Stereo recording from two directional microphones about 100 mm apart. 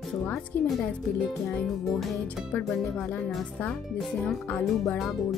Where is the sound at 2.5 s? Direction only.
15° left (ahead or behind).